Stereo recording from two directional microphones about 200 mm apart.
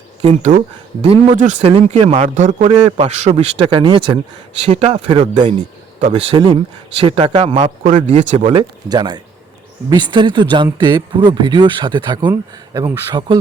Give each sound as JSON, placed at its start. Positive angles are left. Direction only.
{"t": 0.2, "sound": "speech", "side_deg": -25}
{"t": 8.9, "sound": "speech", "side_deg": -20}